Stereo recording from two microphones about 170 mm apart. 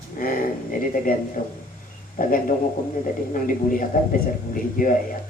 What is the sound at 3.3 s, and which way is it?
Speech, 55° left (ahead or behind).